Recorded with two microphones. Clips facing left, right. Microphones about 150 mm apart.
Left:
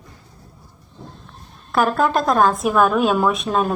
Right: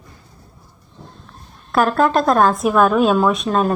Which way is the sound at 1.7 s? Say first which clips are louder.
Right 2 dB; centre (ahead or behind).